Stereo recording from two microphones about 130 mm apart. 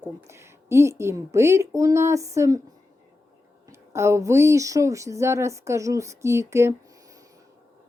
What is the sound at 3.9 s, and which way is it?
Speech, 20° right (ahead or behind).